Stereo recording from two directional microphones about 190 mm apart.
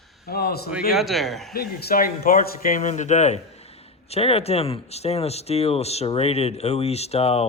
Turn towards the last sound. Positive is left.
turn(degrees=30)  # may be behind; listen again after turning